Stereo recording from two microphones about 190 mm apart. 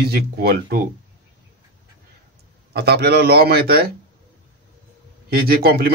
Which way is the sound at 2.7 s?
60° right (ahead or behind).